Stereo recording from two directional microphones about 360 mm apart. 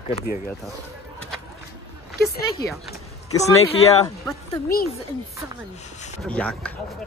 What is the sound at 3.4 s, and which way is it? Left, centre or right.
Speech, centre.